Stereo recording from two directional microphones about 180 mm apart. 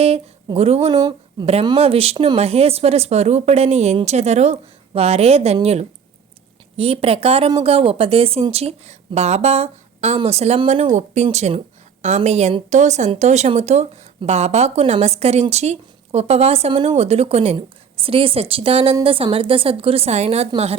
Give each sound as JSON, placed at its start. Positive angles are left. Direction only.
{"t": 0.0, "sound": "speech", "side_deg": -35}
{"t": 0.9, "sound": "speech", "side_deg": -20}